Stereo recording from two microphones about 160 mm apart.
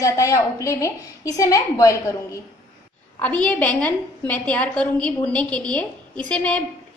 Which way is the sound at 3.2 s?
10° left (ahead or behind).